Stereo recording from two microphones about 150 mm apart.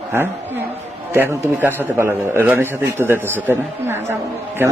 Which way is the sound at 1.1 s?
20° right (ahead or behind).